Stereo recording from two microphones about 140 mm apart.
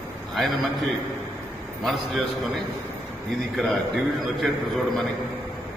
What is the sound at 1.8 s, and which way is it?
Speech, centre (ahead or behind).